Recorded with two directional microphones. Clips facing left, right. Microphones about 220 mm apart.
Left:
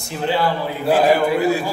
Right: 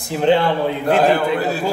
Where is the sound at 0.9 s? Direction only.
10° left (ahead or behind).